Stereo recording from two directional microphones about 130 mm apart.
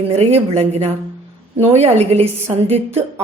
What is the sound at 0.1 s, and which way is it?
A woman's voice, 55° right (ahead or behind).